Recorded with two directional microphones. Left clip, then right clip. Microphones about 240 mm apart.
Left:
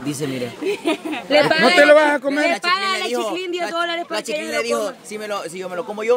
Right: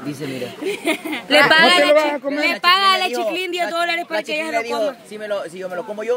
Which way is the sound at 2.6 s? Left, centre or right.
Right.